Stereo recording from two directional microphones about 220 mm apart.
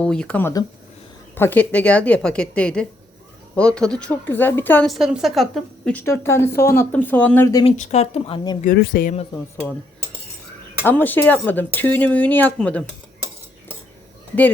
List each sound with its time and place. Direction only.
0.0 s speech: 5° left (ahead or behind)
7.6 s speech: 30° left (ahead or behind)
8.6 s speech: 45° left (ahead or behind)
10.8 s speech: 10° left (ahead or behind)